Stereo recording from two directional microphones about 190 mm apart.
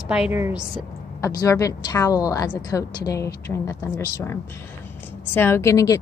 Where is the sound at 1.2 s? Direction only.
15° left (ahead or behind).